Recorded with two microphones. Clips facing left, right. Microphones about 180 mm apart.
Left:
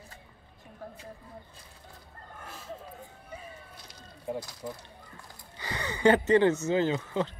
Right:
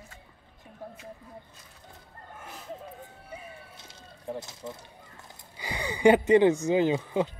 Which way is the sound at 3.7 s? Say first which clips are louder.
Even; 25° right (ahead or behind).